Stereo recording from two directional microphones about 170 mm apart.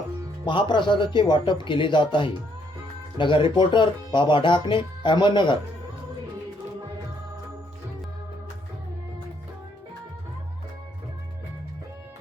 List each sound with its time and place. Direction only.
0.4 s speech: 30° left (ahead or behind)